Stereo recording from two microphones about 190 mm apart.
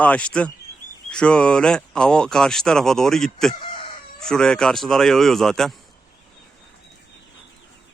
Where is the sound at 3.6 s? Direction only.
25° left (ahead or behind).